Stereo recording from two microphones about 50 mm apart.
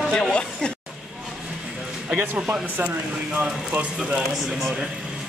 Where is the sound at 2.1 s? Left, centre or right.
Right.